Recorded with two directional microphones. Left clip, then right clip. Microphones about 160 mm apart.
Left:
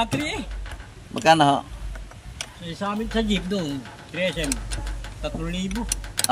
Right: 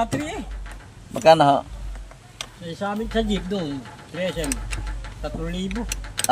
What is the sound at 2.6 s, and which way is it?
Speech, 10° left (ahead or behind).